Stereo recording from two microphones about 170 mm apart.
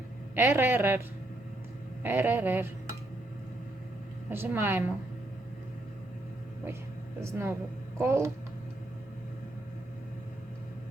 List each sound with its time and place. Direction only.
0.3 s speech: 15° right (ahead or behind)
2.0 s speech: 10° right (ahead or behind)
4.3 s speech: 15° right (ahead or behind)
7.2 s speech: 15° right (ahead or behind)